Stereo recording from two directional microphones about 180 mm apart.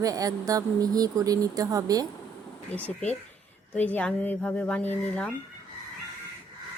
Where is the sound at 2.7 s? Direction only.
10° left (ahead or behind).